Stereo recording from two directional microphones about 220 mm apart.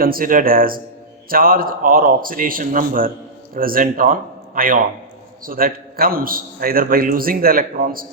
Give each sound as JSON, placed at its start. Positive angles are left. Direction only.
{"t": 0.0, "sound": "a man's voice", "side_deg": -40}